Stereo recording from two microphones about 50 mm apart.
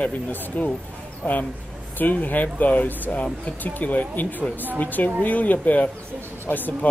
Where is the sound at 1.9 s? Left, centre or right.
Left.